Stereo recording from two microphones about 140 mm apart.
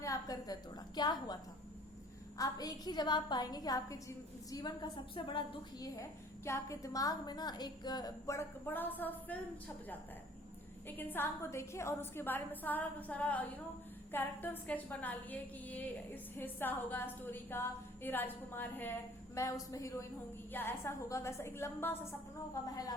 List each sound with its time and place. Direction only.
0.0 s a woman's voice: 25° left (ahead or behind)
2.4 s a woman's voice: 25° left (ahead or behind)
5.8 s a woman's voice: 20° left (ahead or behind)
10.8 s a woman's voice: 15° left (ahead or behind)